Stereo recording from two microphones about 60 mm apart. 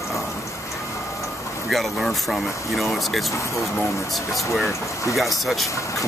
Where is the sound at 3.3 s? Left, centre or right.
Left.